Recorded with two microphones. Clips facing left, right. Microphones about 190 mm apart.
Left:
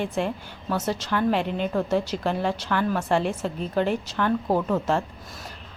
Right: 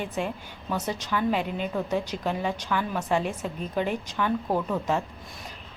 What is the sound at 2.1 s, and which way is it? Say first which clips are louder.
Speech: left 4 dB; 40° left (ahead or behind).